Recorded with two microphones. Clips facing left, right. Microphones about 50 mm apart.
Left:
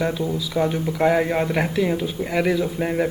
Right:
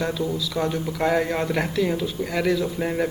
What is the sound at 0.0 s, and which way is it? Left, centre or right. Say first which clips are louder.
Speech: left 2 dB; centre.